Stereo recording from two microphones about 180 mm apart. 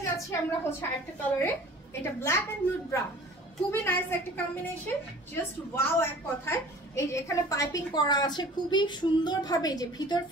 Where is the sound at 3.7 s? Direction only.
10° left (ahead or behind).